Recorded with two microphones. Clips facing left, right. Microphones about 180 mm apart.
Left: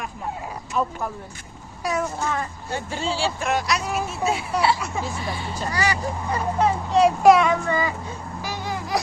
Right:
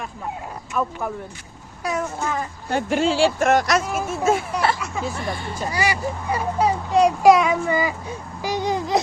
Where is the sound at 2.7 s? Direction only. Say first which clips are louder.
Right 8 dB; 80° right.